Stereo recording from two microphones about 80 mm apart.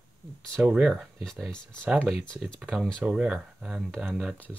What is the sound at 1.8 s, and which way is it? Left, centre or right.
Speech, centre.